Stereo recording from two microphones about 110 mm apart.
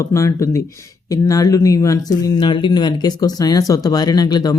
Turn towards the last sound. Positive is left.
turn(degrees=35)  # may be behind; listen again after turning